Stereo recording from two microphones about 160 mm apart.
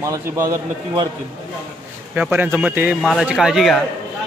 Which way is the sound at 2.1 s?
10° right (ahead or behind).